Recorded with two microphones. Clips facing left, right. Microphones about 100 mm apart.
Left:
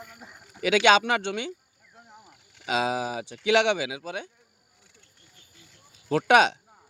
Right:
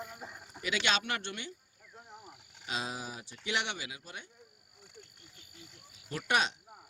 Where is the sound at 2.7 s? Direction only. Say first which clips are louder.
Left 12 dB; 90° left.